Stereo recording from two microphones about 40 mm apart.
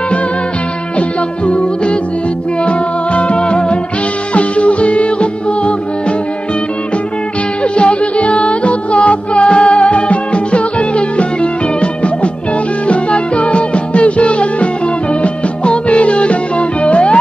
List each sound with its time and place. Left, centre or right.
0.9 s music: left
7.6 s music: left